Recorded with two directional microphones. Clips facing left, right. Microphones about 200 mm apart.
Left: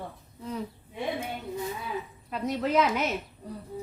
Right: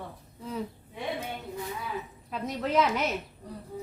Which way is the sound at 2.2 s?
Centre (ahead or behind).